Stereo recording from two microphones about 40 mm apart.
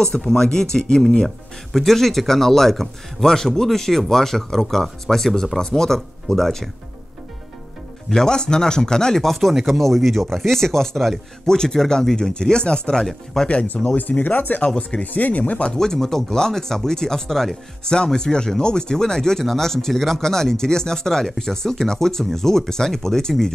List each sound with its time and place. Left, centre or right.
0.0 s speech: centre
8.1 s speech: centre
9.2 s speech: centre
9.5 s speech: centre; by 13.0 s left
13.0 s speech: centre
13.8 s speech: left
15.7 s speech: centre
17.9 s speech: centre